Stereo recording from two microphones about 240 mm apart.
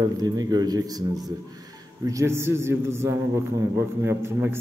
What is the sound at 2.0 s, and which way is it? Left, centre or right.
A man's voice, centre.